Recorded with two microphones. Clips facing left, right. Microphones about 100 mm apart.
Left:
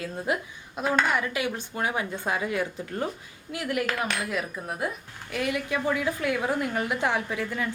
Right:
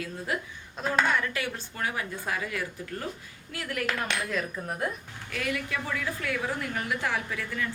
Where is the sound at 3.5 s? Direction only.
15° left (ahead or behind).